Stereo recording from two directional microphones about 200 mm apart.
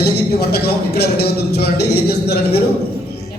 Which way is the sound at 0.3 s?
55° left (ahead or behind).